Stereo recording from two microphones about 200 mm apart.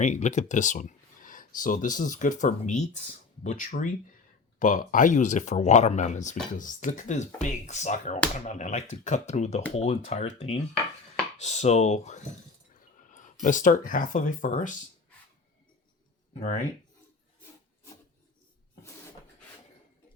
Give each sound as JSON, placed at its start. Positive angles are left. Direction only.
{"t": 0.0, "sound": "speech", "side_deg": 35}
{"t": 16.3, "sound": "speech", "side_deg": 35}